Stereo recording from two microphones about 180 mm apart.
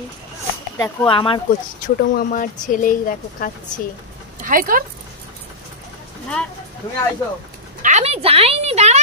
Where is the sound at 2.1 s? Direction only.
50° left (ahead or behind).